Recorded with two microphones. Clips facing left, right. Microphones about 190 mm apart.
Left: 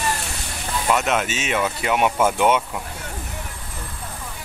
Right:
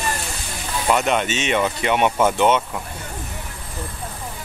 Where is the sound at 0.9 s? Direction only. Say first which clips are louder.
Right 2 dB; centre (ahead or behind).